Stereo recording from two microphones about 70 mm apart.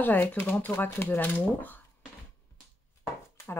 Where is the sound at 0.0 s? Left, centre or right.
Left.